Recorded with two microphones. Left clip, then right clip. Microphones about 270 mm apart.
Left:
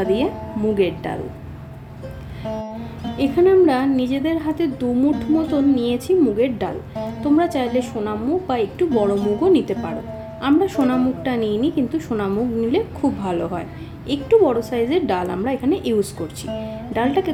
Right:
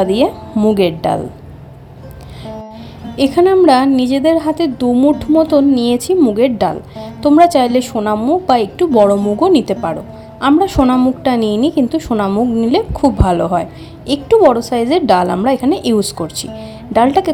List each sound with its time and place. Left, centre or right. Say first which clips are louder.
0.0 s a woman's voice: right 7 dB; right
2.5 s music: left 1 dB; centre
3.2 s a woman's voice: right 5 dB; right